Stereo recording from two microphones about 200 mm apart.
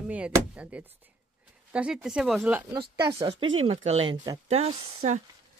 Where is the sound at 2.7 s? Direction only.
20° right (ahead or behind).